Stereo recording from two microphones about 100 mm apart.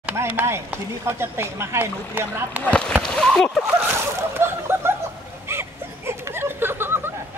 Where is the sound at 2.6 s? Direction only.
10° left (ahead or behind).